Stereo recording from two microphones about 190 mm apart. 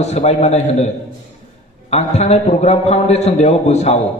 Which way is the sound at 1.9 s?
35° left (ahead or behind).